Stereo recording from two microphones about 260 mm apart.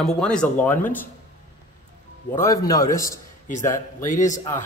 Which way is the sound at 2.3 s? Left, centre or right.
Centre.